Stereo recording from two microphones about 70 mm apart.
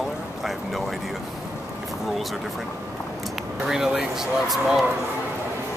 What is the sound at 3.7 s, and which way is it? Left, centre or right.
Speech, centre.